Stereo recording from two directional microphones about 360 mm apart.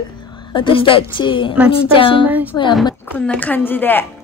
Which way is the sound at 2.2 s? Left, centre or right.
Centre.